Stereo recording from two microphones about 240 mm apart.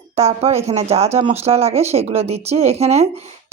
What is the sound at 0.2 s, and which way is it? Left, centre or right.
A woman's voice, right.